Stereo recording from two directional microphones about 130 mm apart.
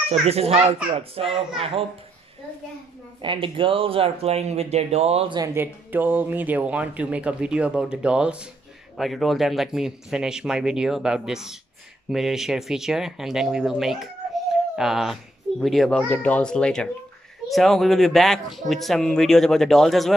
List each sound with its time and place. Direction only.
0.2 s speech: 50° right (ahead or behind)
3.2 s speech: 40° right (ahead or behind)
5.5 s speech: 15° right (ahead or behind); by 16.1 s centre (ahead or behind)
16.1 s speech: 10° left (ahead or behind)